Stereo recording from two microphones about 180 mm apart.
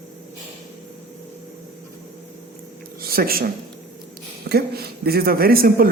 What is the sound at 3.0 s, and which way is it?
A man's voice, 55° right (ahead or behind).